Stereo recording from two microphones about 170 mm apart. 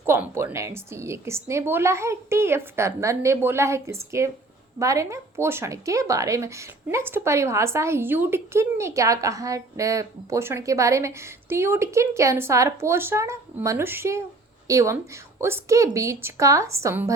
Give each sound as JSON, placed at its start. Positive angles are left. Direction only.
{"t": 0.0, "sound": "a woman's voice", "side_deg": -15}